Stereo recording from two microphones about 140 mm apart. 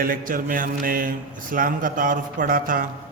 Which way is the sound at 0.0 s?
85° right.